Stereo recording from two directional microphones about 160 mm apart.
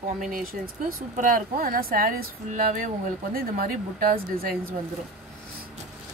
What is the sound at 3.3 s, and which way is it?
Speech, 60° right (ahead or behind).